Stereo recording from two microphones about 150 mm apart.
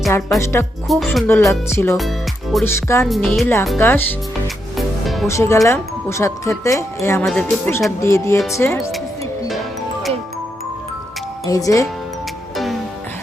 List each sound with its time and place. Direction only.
0.3 s speech: 20° left (ahead or behind)
0.9 s speech: centre (ahead or behind)
1.3 s speech: 15° left (ahead or behind)
2.0 s music: centre (ahead or behind)
2.6 s speech: 20° left (ahead or behind)
3.1 s speech: centre (ahead or behind)
3.4 s speech: 15° left (ahead or behind)
5.0 s music: centre (ahead or behind)
5.3 s speech: 20° left (ahead or behind)
11.4 s speech: 20° left (ahead or behind)